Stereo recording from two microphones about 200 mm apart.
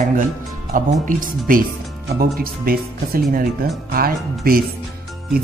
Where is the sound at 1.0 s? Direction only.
40° right (ahead or behind).